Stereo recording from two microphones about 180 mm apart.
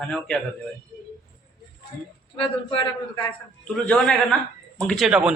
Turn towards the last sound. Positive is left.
turn(degrees=-5)  # may be behind; listen again after turning